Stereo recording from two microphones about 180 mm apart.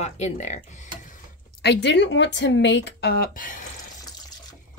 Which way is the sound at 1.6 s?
70° left (ahead or behind).